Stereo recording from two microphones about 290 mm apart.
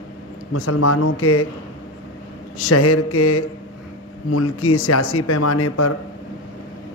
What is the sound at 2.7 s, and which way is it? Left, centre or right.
A man's voice, left.